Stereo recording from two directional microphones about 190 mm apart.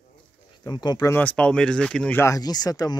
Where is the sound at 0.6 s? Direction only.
20° left (ahead or behind).